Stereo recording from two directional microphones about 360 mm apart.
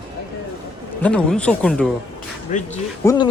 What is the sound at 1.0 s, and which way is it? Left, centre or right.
Speech, centre.